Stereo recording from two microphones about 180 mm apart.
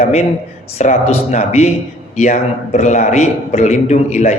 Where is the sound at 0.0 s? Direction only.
40° left (ahead or behind).